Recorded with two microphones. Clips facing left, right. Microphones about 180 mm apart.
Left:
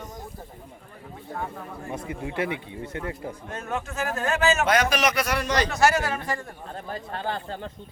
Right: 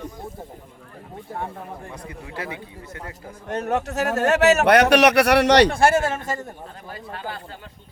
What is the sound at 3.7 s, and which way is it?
A man's voice, 70° right (ahead or behind).